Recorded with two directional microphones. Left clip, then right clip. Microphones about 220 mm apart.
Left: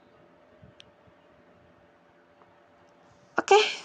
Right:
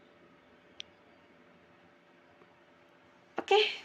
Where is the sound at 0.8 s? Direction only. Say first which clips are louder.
Right 8 dB; 5° right (ahead or behind).